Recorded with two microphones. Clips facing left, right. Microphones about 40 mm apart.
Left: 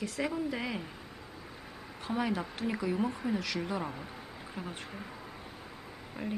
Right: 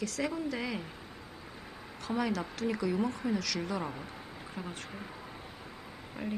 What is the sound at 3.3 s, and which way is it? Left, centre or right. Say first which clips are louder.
Speech: even; centre.